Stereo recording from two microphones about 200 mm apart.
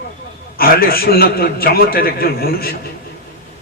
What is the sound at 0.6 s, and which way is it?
Speech, 50° left (ahead or behind).